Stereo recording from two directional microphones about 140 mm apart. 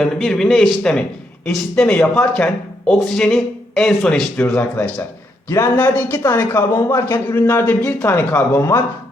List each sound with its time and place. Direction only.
0.0 s a man's voice: 5° left (ahead or behind)